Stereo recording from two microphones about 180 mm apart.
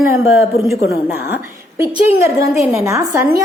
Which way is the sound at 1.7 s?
15° right (ahead or behind).